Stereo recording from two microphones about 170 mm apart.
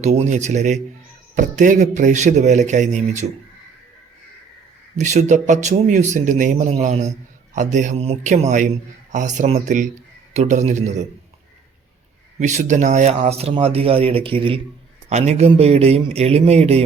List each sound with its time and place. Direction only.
0.0 s speech: 40° right (ahead or behind)
4.9 s speech: 45° right (ahead or behind)
12.4 s speech: 45° right (ahead or behind)